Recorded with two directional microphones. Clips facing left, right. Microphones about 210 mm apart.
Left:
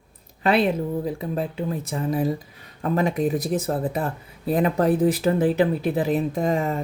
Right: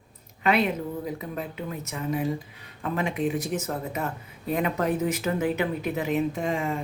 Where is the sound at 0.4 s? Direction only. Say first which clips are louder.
Left 4 dB; 30° left (ahead or behind).